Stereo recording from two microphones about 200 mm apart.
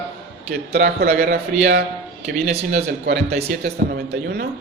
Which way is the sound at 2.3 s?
35° right (ahead or behind).